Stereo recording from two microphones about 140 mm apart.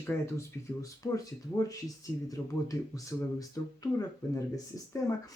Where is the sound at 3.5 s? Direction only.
25° left (ahead or behind).